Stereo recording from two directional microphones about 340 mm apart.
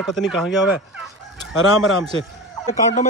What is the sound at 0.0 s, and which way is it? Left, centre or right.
Chicken, centre.